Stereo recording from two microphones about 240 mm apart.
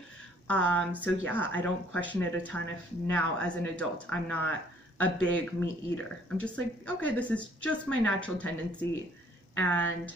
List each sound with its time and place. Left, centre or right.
0.5 s speech: centre